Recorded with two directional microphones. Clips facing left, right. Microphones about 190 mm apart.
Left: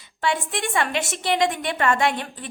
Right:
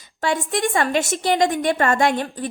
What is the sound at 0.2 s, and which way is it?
A woman's voice, 40° right (ahead or behind).